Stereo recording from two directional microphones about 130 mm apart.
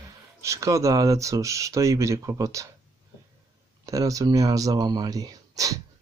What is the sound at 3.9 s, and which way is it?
Speech, 25° right (ahead or behind).